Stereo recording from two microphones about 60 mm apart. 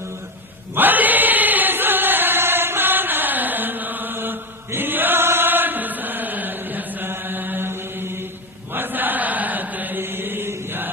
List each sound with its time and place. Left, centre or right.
0.7 s chant: right